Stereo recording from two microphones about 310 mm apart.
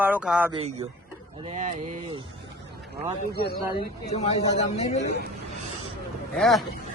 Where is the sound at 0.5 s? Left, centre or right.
Centre.